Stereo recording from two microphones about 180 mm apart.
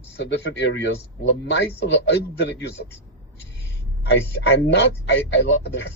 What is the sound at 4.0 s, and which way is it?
A man's voice, 70° left (ahead or behind).